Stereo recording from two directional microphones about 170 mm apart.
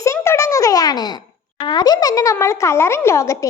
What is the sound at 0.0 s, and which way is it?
A child's voice, 15° left (ahead or behind).